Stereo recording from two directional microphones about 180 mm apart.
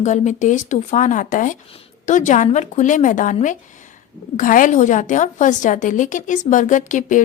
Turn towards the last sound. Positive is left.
turn(degrees=45)  # may be behind; listen again after turning